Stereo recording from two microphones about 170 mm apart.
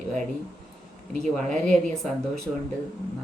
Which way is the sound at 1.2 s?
5° left (ahead or behind).